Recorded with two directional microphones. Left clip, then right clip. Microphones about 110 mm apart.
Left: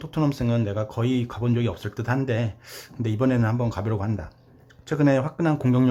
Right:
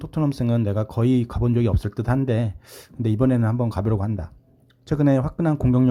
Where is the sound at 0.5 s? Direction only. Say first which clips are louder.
Right 2 dB; 50° right (ahead or behind).